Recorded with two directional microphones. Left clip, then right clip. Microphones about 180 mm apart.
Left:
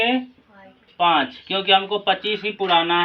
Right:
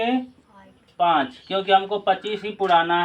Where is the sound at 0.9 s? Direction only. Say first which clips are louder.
Left 1 dB; 25° right (ahead or behind).